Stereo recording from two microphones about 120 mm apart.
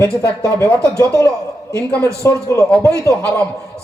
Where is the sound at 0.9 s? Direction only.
30° right (ahead or behind).